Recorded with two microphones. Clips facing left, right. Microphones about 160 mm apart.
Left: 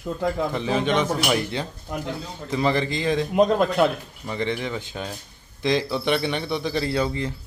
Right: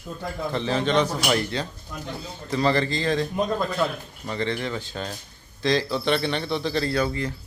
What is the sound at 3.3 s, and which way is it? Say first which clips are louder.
Speech: left 6 dB; 80° left.